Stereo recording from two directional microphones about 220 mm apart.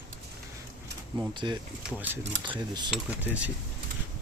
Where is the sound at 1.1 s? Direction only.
20° right (ahead or behind).